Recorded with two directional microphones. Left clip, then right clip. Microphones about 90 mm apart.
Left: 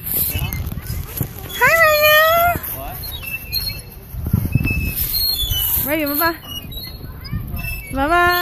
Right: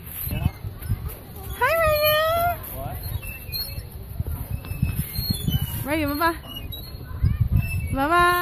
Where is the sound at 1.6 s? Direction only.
25° left (ahead or behind).